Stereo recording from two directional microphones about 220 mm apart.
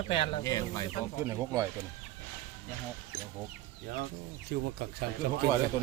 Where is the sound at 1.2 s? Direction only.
15° right (ahead or behind).